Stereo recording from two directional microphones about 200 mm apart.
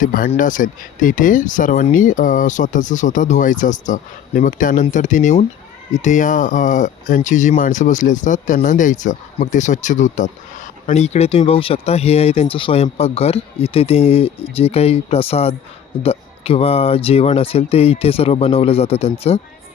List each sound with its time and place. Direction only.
0.0 s speech: 40° left (ahead or behind)